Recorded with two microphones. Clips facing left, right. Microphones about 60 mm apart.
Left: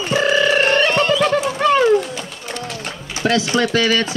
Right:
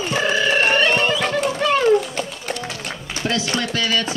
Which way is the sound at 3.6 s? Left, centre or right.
Left.